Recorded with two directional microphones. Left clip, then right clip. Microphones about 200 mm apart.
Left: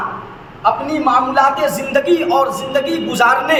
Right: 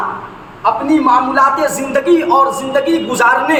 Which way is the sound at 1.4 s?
15° right (ahead or behind).